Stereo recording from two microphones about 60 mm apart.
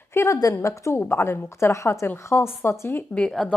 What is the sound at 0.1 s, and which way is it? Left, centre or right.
A woman's voice, left.